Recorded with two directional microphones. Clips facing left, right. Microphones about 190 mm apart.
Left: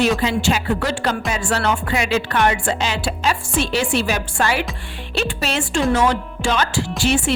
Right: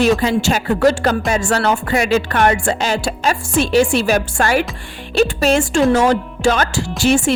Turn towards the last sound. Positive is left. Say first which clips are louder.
# right 4 dB
turn(degrees=-45)  # may be behind; listen again after turning